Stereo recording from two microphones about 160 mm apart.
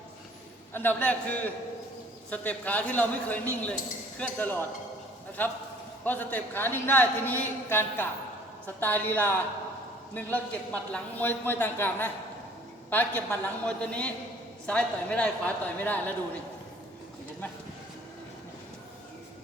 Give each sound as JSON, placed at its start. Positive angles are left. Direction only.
{"t": 0.7, "sound": "a man's voice", "side_deg": 10}